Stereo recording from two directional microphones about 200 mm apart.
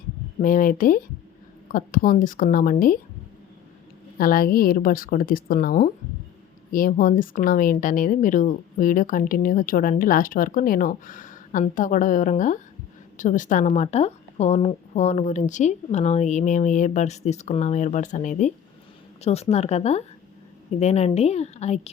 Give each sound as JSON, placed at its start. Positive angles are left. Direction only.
{"t": 0.3, "sound": "speech", "side_deg": 40}
{"t": 4.2, "sound": "a woman's voice", "side_deg": 45}